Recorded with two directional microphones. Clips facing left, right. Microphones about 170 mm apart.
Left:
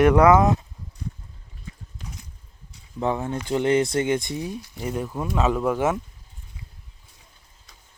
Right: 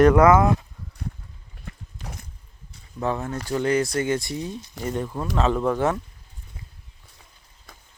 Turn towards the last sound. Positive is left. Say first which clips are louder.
# even
turn(degrees=10)  # may be behind; listen again after turning